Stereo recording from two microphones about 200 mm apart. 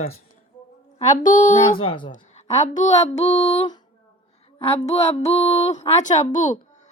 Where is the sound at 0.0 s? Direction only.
40° left (ahead or behind).